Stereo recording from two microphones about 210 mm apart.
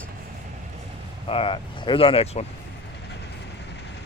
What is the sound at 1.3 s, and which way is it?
Speech, 25° left (ahead or behind).